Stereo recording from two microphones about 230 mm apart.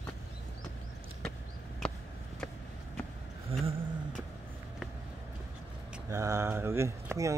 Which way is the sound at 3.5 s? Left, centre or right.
Right.